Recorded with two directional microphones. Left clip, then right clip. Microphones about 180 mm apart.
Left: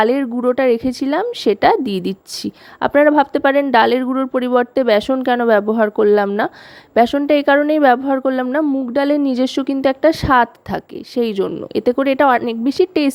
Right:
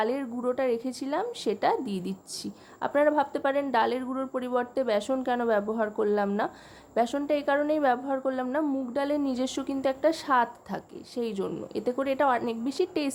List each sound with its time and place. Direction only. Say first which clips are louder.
0.0 s a woman's voice: left 13 dB; 40° left (ahead or behind)